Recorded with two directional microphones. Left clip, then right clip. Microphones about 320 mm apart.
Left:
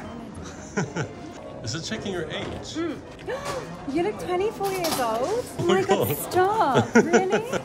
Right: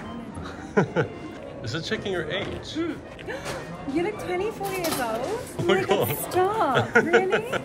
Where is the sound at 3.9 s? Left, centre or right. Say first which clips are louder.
Left 1 dB; centre.